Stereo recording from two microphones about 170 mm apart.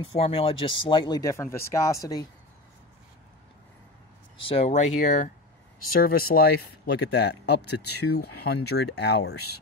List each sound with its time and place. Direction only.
0.2 s speech: 35° left (ahead or behind)
4.4 s speech: 35° left (ahead or behind)
5.9 s speech: 60° left (ahead or behind)
7.0 s speech: 85° left